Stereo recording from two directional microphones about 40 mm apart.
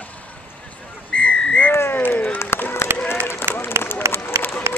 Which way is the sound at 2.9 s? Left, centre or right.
Right.